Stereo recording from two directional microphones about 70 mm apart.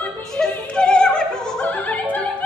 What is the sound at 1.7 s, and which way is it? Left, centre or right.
Opera, left.